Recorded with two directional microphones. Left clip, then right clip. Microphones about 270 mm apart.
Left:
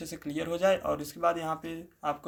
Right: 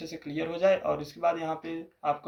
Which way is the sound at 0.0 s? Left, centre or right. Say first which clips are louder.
Right 1 dB; left.